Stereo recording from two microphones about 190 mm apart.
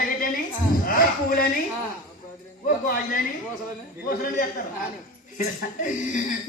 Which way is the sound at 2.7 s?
45° left (ahead or behind).